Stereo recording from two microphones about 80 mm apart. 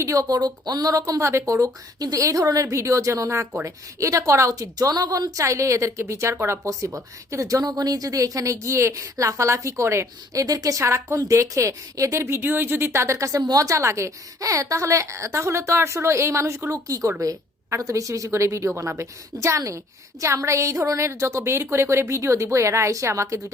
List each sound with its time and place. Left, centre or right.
0.0 s a woman's voice: right
0.3 s a woman's voice: right
12.9 s a woman's voice: right